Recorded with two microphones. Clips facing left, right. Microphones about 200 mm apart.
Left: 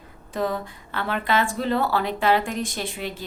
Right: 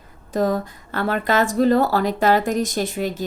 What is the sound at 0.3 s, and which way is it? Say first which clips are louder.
A woman's voice: right 6 dB; 40° right (ahead or behind).